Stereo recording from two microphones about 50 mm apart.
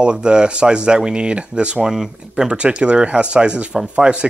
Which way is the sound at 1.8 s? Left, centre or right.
Centre.